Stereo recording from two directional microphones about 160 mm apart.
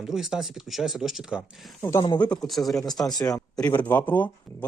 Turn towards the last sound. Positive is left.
turn(degrees=10)  # may be behind; listen again after turning